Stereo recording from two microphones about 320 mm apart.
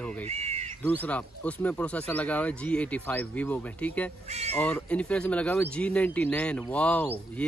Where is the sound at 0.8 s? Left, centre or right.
Centre.